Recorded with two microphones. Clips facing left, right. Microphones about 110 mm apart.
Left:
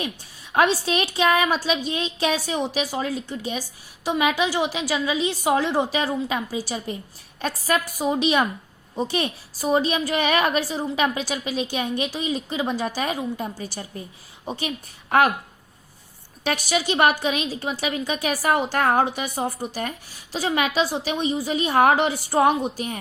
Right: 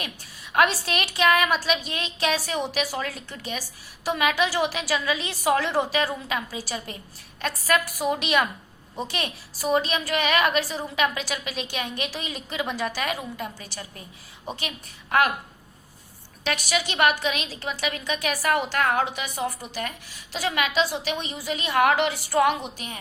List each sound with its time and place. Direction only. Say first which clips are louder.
0.5 s a woman's voice: left 2 dB; 25° left (ahead or behind)
16.5 s a woman's voice: left 4 dB; 30° left (ahead or behind)